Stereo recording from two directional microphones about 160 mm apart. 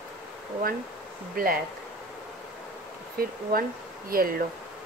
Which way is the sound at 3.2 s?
65° right (ahead or behind).